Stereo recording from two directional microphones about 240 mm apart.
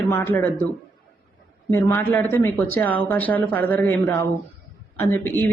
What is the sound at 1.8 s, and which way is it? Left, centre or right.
Speech, centre.